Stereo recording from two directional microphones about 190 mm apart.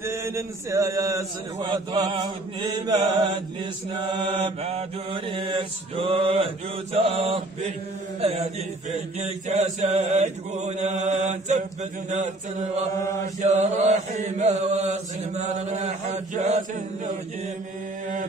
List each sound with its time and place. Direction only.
0.0 s mantra: 15° right (ahead or behind)
4.0 s mantra: 25° right (ahead or behind)
9.5 s mantra: 35° right (ahead or behind)
13.4 s mantra: 35° right (ahead or behind)